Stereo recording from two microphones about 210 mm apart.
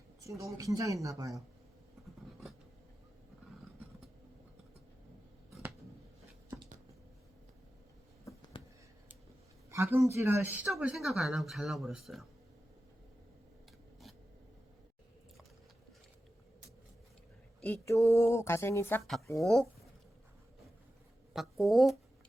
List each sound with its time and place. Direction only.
0.3 s speech: 15° right (ahead or behind)
8.2 s a sound: 15° left (ahead or behind)
9.6 s speech: 15° right (ahead or behind)
17.6 s speech: 10° left (ahead or behind)
21.3 s speech: centre (ahead or behind)